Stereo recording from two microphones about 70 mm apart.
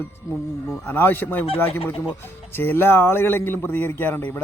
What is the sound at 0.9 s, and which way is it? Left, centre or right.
A man's voice, left.